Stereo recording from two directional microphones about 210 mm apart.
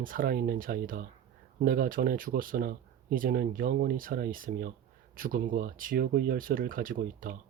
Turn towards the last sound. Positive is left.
turn(degrees=-40)  # may be behind; listen again after turning